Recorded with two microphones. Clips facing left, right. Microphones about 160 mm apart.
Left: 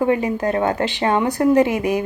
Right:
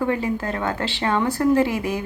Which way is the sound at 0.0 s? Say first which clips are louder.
Left 4 dB; 20° left (ahead or behind).